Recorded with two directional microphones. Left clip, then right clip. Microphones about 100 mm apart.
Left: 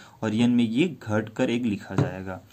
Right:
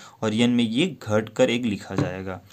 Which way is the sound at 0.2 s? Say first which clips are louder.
Right 2 dB; 35° right (ahead or behind).